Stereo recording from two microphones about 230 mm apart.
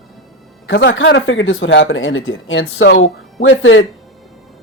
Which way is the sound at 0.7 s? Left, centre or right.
Left.